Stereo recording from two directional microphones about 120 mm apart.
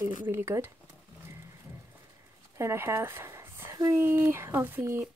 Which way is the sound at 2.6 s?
20° right (ahead or behind).